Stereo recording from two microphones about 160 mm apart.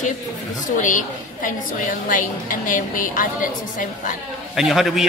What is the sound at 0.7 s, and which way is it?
A woman's voice, 55° left (ahead or behind).